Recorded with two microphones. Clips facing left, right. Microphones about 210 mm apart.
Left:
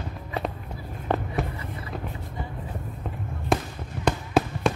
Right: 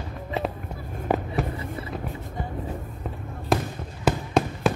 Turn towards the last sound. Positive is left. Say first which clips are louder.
# even
turn(degrees=0)  # may be behind; listen again after turning